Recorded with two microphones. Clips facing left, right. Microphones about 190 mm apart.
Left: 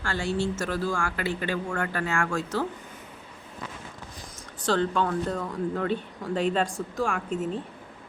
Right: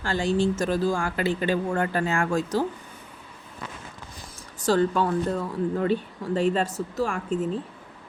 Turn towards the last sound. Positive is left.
turn(degrees=5)  # may be behind; listen again after turning